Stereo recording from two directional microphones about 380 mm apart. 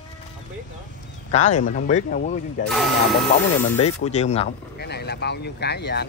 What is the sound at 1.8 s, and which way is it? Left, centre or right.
Speech, left.